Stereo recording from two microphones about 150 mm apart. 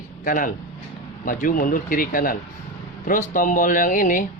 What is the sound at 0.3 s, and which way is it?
Speech, 60° left (ahead or behind).